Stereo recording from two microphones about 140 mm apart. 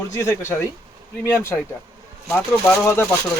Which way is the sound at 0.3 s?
20° left (ahead or behind).